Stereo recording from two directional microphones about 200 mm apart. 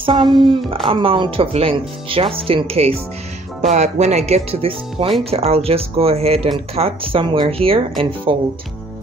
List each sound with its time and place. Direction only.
0.0 s speech: 25° right (ahead or behind)